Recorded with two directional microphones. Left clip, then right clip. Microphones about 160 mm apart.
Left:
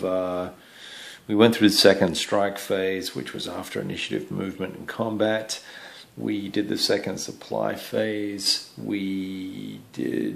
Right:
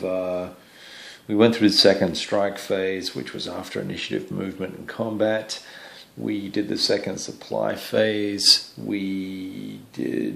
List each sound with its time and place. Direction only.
0.0 s a sound: 20° left (ahead or behind)
1.2 s speech: 5° left (ahead or behind)
7.7 s speech: 20° right (ahead or behind)
8.8 s speech: centre (ahead or behind)